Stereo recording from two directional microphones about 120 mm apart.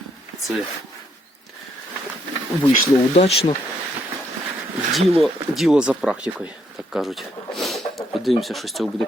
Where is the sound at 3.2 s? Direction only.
60° left (ahead or behind).